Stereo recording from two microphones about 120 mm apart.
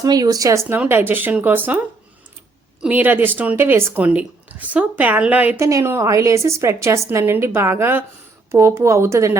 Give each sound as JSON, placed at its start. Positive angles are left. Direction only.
{"t": 0.0, "sound": "a woman's voice", "side_deg": -30}
{"t": 2.8, "sound": "speech", "side_deg": -15}
{"t": 5.5, "sound": "a woman's voice", "side_deg": -25}